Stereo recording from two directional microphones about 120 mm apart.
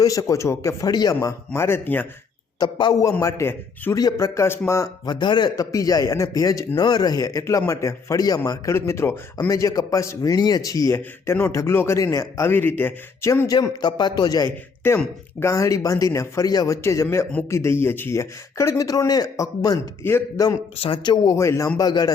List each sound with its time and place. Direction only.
0.0 s a man's voice: 30° left (ahead or behind)
1.5 s speech: 20° left (ahead or behind)
2.6 s speech: 40° left (ahead or behind)
3.0 s a man's voice: 25° left (ahead or behind)
5.0 s a man's voice: 40° left (ahead or behind); by 13.5 s 20° left (ahead or behind)
13.5 s a man's voice: 35° left (ahead or behind)
20.7 s speech: 50° left (ahead or behind)
21.2 s a man's voice: 25° left (ahead or behind)